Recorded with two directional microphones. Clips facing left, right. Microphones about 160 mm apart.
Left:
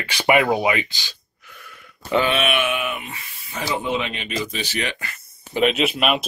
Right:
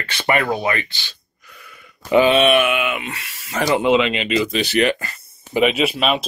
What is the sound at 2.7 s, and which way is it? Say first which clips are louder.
Speech: right 4 dB; 90° right.